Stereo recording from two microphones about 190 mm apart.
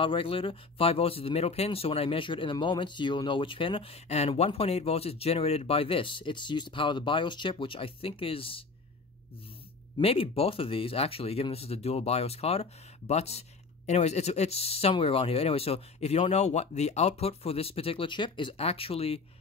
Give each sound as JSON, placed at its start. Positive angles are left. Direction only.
{"t": 0.0, "sound": "speech", "side_deg": 30}
{"t": 9.9, "sound": "speech", "side_deg": 30}